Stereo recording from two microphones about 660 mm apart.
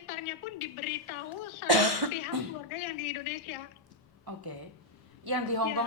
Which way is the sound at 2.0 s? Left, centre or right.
Right.